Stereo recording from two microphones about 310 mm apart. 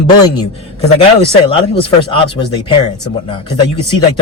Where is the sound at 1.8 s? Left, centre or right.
Centre.